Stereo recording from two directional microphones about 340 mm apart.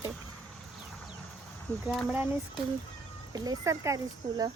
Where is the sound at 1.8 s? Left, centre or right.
Centre.